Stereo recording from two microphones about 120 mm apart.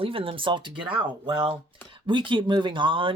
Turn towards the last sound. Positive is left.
turn(degrees=-45)  # may be behind; listen again after turning